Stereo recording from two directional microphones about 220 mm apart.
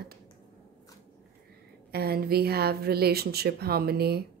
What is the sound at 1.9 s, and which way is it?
Speech, 45° right (ahead or behind).